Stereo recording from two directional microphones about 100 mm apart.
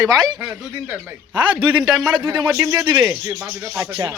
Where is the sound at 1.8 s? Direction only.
Centre (ahead or behind).